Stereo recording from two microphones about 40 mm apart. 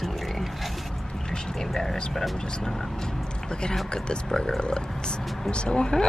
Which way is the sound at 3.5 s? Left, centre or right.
Left.